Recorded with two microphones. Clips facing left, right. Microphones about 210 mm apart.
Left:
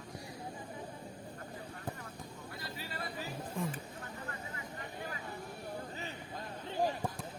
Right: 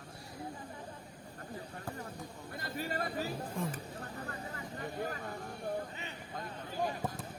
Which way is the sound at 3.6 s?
Centre (ahead or behind).